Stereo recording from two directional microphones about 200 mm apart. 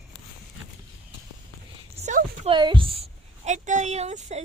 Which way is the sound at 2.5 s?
25° right (ahead or behind).